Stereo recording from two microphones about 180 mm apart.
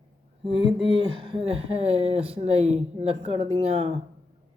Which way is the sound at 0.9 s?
30° right (ahead or behind).